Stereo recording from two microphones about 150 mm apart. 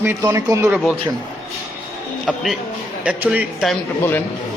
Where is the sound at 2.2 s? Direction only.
Centre (ahead or behind).